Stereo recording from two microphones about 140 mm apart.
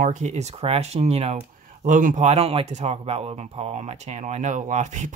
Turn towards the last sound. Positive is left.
turn(degrees=-60)  # may be behind; listen again after turning